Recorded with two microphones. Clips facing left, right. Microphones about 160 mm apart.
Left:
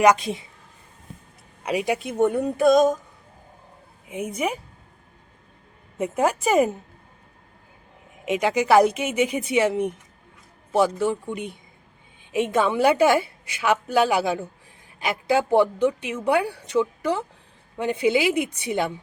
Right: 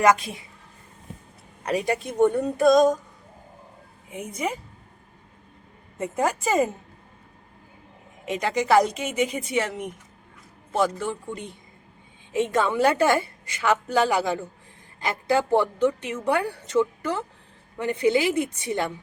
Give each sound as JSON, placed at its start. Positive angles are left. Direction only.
{"t": 0.0, "sound": "a woman's voice", "side_deg": 20}
{"t": 1.6, "sound": "a woman's voice", "side_deg": 10}
{"t": 4.1, "sound": "a woman's voice", "side_deg": 15}
{"t": 6.0, "sound": "a woman's voice", "side_deg": 10}
{"t": 8.2, "sound": "a woman's voice", "side_deg": 15}